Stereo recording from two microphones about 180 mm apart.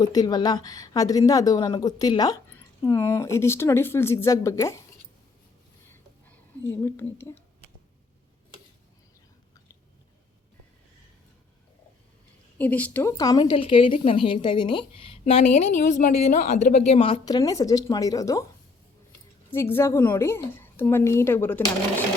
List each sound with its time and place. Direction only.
0.0 s a woman's voice: 20° left (ahead or behind)
6.8 s speech: 15° left (ahead or behind)
12.5 s speech: 10° left (ahead or behind)
13.1 s a woman's voice: 25° left (ahead or behind)
19.5 s speech: 10° left (ahead or behind)